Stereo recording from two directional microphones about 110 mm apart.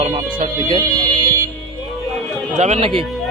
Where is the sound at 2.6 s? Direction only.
90° right.